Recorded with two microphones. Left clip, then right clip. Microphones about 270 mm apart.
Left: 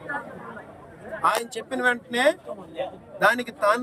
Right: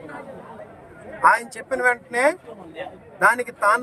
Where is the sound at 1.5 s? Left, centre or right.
Centre.